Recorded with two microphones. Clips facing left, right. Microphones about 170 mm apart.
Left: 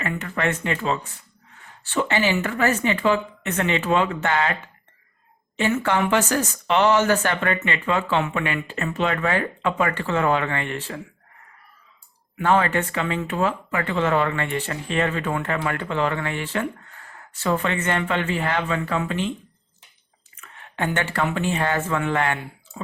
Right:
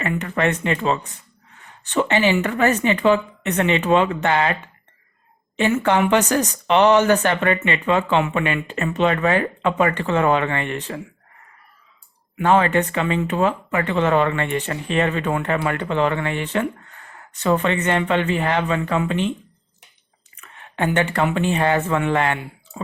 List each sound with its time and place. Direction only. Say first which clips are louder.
0.0 s speech: right 4 dB; 20° right (ahead or behind)
1.8 s speech: right 4 dB; 20° right (ahead or behind)
5.5 s speech: right 3 dB; 20° right (ahead or behind)
12.4 s speech: right 3 dB; 20° right (ahead or behind)
20.3 s speech: right 3 dB; 15° right (ahead or behind)